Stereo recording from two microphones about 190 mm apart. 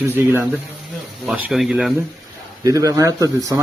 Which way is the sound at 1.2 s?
Centre (ahead or behind).